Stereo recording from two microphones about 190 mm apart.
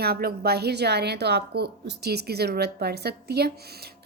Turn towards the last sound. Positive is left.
turn(degrees=-55)  # may be behind; listen again after turning